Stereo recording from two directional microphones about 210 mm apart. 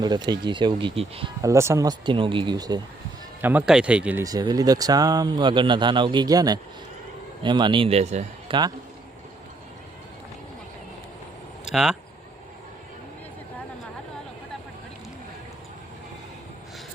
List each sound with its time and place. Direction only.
0.0 s speech: 20° right (ahead or behind)
1.4 s speech: 15° right (ahead or behind)
3.4 s speech: 5° right (ahead or behind); by 8.7 s 25° right (ahead or behind)
11.7 s speech: centre (ahead or behind)